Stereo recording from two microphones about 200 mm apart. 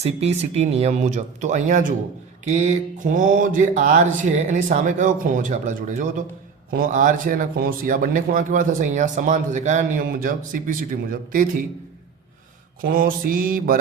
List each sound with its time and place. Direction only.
0.0 s speech: 30° right (ahead or behind)
12.8 s mantra: 45° right (ahead or behind)